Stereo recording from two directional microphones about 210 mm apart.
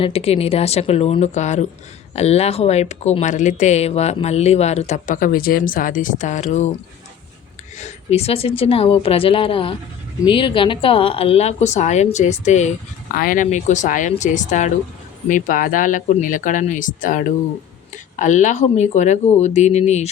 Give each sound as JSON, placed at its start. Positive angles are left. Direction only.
{"t": 0.0, "sound": "a woman's voice", "side_deg": 30}
{"t": 7.8, "sound": "a woman's voice", "side_deg": 30}